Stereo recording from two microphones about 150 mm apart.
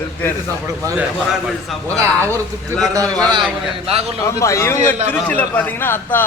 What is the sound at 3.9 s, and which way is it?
Speech, 45° right (ahead or behind).